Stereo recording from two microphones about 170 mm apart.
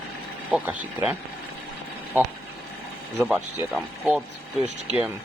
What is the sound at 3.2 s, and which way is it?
Speech, 15° right (ahead or behind).